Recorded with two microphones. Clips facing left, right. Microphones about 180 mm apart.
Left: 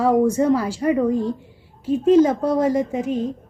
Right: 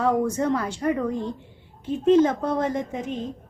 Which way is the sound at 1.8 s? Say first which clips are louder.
Left 3 dB; 10° left (ahead or behind).